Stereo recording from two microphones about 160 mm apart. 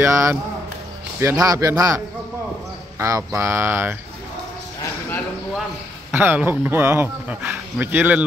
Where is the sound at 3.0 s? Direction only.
20° right (ahead or behind).